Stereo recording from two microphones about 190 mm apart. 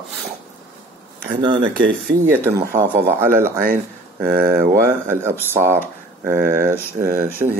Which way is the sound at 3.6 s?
50° right (ahead or behind).